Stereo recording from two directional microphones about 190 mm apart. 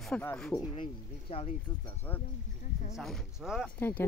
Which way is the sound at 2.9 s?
Centre (ahead or behind).